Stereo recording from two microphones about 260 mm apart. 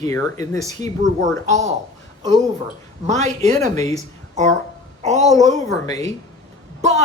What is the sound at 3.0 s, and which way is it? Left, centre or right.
Speech, right.